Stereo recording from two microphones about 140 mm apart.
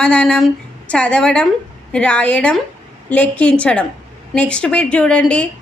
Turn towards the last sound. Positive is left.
turn(degrees=10)  # may be behind; listen again after turning